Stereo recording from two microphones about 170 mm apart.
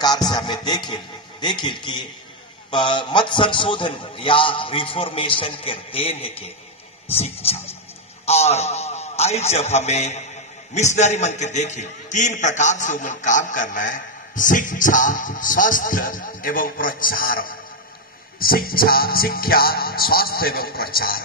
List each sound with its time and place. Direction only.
0.0 s a sound: 25° left (ahead or behind)
2.7 s a man's voice: 30° left (ahead or behind); by 17.6 s 55° left (ahead or behind)
18.4 s music: 60° left (ahead or behind)